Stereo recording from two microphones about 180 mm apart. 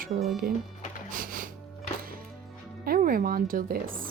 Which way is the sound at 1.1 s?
50° right (ahead or behind).